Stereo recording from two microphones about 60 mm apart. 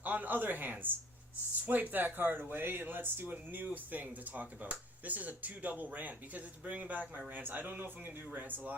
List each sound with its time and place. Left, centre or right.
0.0 s speech: right